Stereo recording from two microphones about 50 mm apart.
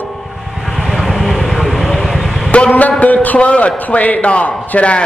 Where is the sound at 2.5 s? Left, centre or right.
Left.